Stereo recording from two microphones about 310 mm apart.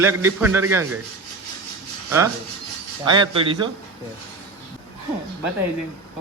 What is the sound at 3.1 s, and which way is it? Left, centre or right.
Speech, centre.